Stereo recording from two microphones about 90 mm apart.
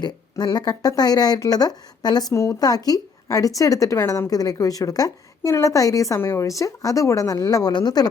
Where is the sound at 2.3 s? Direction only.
35° left (ahead or behind).